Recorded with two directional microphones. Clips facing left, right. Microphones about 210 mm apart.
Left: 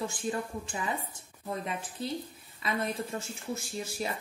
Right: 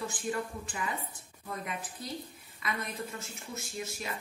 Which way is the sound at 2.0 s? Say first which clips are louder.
Left 8 dB; 25° left (ahead or behind).